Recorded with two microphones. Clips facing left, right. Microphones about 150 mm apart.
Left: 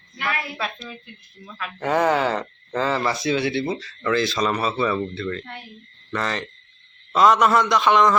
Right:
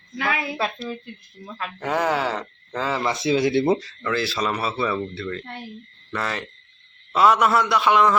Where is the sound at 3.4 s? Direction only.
40° right (ahead or behind).